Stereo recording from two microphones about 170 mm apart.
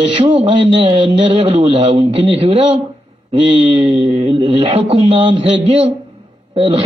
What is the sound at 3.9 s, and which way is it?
Mantra, 30° right (ahead or behind).